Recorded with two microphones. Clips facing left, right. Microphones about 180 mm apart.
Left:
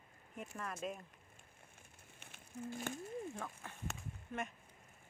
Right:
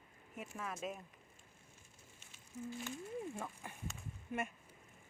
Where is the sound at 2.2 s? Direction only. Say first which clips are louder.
Even; 55° left (ahead or behind).